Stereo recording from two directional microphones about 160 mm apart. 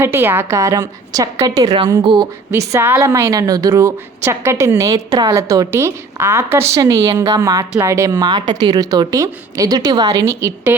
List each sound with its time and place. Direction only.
0.0 s a woman's voice: 15° right (ahead or behind)